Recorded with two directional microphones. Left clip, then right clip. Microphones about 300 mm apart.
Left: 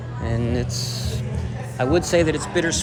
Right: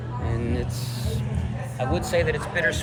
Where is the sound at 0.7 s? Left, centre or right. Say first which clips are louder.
Left 5 dB; left.